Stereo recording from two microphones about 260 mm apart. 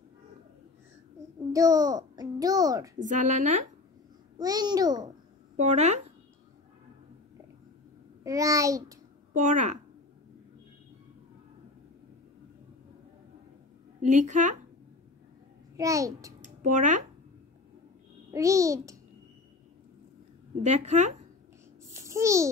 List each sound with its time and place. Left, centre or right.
1.5 s a child's voice: centre
3.0 s a woman's voice: right
4.4 s a child's voice: centre
5.6 s a woman's voice: right
8.2 s a child's voice: centre
9.3 s a woman's voice: right
14.0 s a woman's voice: right
15.7 s a child's voice: centre
16.3 s a sound: right
18.3 s a child's voice: centre
20.6 s a woman's voice: right
21.9 s babbling: centre